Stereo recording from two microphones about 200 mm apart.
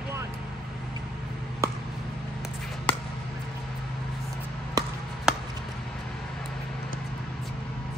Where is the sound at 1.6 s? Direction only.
15° right (ahead or behind).